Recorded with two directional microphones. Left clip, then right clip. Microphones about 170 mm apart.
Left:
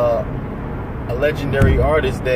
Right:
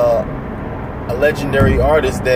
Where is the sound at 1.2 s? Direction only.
5° left (ahead or behind).